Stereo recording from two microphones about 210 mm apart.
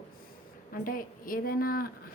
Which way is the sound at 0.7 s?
40° left (ahead or behind).